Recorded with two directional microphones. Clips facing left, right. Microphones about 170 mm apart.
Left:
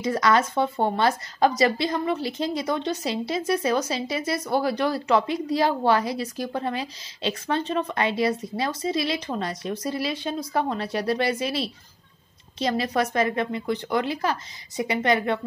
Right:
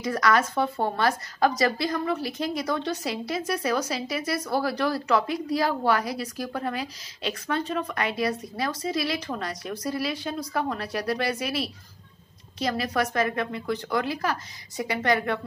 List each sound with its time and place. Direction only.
0.0 s speech: 25° left (ahead or behind)